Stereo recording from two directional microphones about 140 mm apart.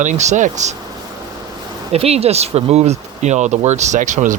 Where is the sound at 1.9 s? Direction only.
45° right (ahead or behind); by 4.3 s 65° right (ahead or behind).